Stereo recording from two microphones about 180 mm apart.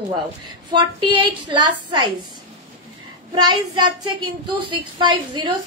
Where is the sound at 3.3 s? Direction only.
25° right (ahead or behind).